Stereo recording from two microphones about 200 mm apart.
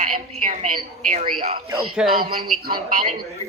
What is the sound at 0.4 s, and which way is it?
Speech, 40° right (ahead or behind).